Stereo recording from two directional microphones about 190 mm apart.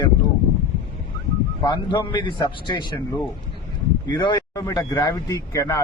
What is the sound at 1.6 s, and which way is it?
Speech, 25° left (ahead or behind).